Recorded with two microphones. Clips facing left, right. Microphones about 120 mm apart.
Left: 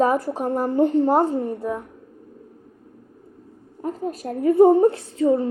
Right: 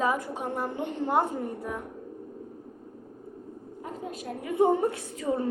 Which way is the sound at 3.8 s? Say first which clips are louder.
Left 9 dB; 40° left (ahead or behind).